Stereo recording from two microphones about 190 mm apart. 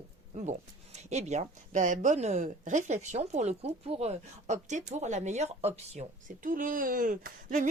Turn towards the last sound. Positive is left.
turn(degrees=-45)  # may be behind; listen again after turning